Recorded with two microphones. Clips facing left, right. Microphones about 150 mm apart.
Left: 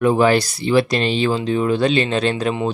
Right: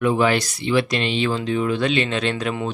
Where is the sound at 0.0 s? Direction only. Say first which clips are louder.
Left 4 dB; 35° left (ahead or behind).